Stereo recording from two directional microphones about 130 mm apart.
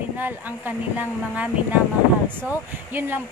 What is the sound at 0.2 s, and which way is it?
Speech, 15° right (ahead or behind).